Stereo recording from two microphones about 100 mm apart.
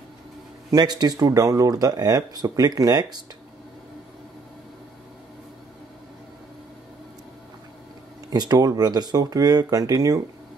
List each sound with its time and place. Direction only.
0.7 s speech: 45° right (ahead or behind)
8.3 s speech: 40° right (ahead or behind)